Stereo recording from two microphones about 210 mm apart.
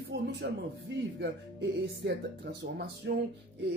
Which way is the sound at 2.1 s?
55° right (ahead or behind).